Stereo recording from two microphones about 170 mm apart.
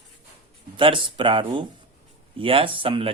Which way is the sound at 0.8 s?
30° right (ahead or behind).